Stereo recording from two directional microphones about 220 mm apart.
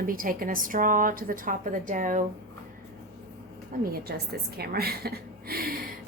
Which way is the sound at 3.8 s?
45° right (ahead or behind).